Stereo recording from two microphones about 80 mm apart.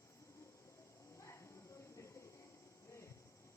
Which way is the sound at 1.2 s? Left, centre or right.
Left.